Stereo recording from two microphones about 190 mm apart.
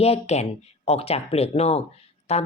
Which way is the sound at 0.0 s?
35° left (ahead or behind).